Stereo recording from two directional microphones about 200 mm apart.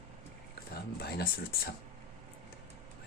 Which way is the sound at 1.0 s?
50° left (ahead or behind).